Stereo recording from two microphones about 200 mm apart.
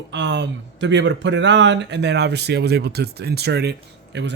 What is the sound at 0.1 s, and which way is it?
Speech, 60° right (ahead or behind).